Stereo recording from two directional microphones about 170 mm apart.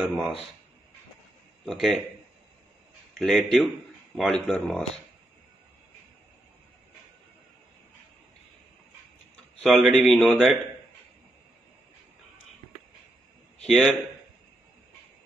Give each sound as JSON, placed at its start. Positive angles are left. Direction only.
{"t": 0.0, "sound": "a man's voice", "side_deg": -5}
{"t": 1.7, "sound": "a man's voice", "side_deg": 0}
{"t": 3.2, "sound": "speech", "side_deg": 0}
{"t": 9.6, "sound": "a man's voice", "side_deg": 0}
{"t": 13.7, "sound": "a man's voice", "side_deg": 0}